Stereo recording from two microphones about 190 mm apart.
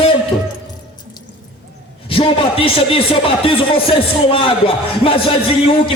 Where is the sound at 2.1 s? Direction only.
30° left (ahead or behind).